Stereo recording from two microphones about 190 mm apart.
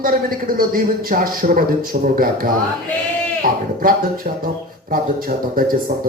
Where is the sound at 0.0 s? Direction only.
50° right (ahead or behind).